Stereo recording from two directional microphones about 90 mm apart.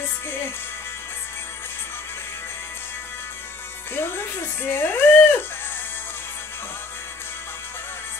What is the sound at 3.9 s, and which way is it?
Music, 25° left (ahead or behind).